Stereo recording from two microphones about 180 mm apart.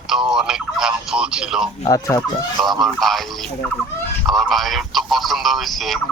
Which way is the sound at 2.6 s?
Centre (ahead or behind).